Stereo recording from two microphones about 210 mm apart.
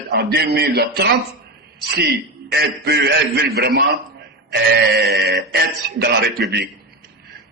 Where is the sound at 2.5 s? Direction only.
50° right (ahead or behind).